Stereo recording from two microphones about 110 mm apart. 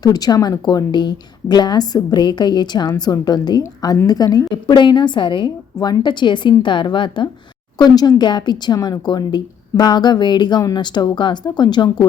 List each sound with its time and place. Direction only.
0.0 s a woman's voice: 35° left (ahead or behind)
4.5 s a woman's voice: 45° left (ahead or behind)